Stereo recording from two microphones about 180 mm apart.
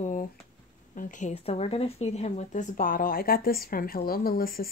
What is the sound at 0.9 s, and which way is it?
Speech, 45° left (ahead or behind).